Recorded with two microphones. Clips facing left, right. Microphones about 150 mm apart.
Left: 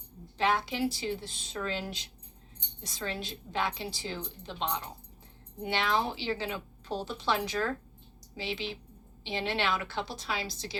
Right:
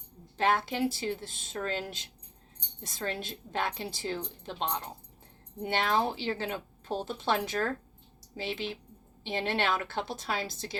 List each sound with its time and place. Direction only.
0.3 s speech: 50° right (ahead or behind)